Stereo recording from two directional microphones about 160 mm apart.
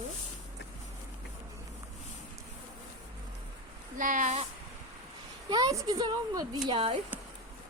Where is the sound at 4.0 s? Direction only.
55° right (ahead or behind).